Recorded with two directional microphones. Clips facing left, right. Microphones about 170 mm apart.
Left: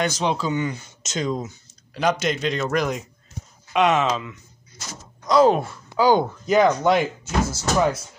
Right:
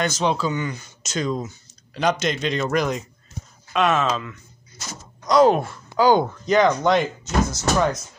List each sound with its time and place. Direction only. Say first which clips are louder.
0.0 s speech: right 1 dB; 15° left (ahead or behind)
2.0 s speech: even; 5° left (ahead or behind)
3.7 s speech: left 1 dB; 15° left (ahead or behind)
5.2 s speech: right 1 dB; centre (ahead or behind)